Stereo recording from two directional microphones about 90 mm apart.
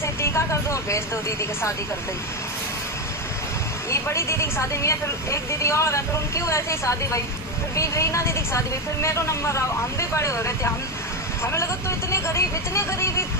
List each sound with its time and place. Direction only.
0.0 s speech: 30° left (ahead or behind)
3.8 s speech: 30° left (ahead or behind)